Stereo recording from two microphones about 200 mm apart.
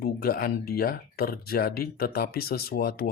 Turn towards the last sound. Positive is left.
turn(degrees=50)  # may be behind; listen again after turning